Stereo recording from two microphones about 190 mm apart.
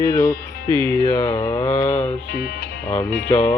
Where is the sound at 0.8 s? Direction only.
15° left (ahead or behind).